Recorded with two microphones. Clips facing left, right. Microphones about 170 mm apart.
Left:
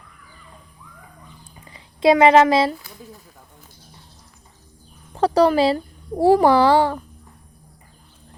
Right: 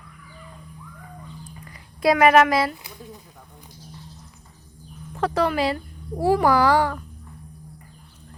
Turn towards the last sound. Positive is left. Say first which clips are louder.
# left 3 dB
turn(degrees=30)  # may be behind; listen again after turning